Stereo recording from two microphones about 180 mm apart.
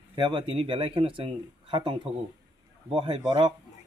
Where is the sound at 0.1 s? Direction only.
25° right (ahead or behind).